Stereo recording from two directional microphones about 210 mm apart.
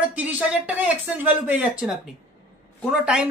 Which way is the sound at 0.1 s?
5° right (ahead or behind).